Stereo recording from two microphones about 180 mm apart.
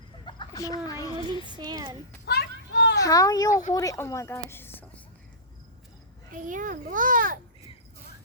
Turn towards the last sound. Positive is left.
turn(degrees=-50)  # may be behind; listen again after turning